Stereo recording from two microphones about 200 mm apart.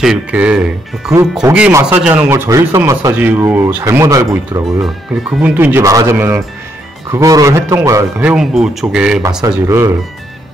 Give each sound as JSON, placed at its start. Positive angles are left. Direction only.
{"t": 0.0, "sound": "speech", "side_deg": -5}
{"t": 9.4, "sound": "speech", "side_deg": -15}